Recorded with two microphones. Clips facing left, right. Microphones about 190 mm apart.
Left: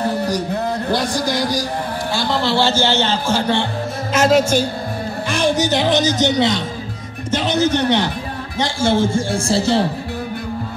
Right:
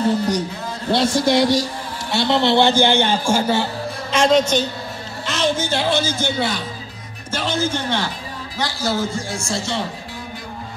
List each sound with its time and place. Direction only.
0.5 s a sound: 60° left (ahead or behind)
0.9 s a man's voice: 25° right (ahead or behind); by 3.6 s 10° right (ahead or behind)
4.1 s a man's voice: 5° left (ahead or behind); by 9.8 s 35° left (ahead or behind)